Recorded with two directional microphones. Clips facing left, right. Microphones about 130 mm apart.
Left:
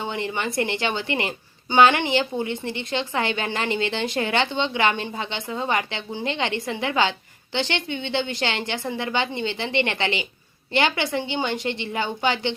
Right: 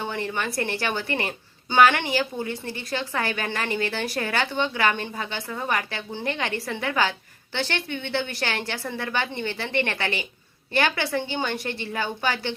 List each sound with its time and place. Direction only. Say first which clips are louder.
0.0 s a woman's voice: left 1 dB; 20° left (ahead or behind)